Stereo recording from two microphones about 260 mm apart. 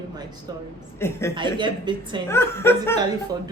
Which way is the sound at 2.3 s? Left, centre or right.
Centre.